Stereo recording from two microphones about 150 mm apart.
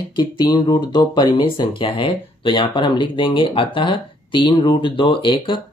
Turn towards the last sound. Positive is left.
turn(degrees=30)  # may be behind; listen again after turning